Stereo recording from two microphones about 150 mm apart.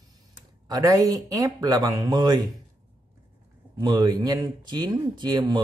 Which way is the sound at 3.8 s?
25° right (ahead or behind).